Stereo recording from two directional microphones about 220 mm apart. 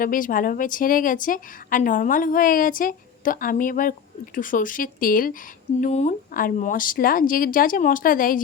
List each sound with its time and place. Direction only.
0.0 s a woman's voice: 40° left (ahead or behind)